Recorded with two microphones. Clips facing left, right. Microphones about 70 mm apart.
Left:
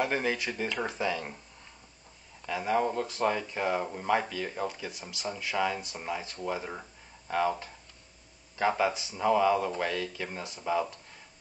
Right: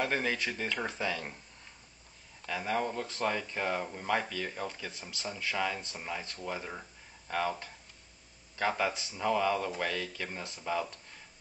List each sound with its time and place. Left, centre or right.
0.0 s speech: centre
2.4 s speech: centre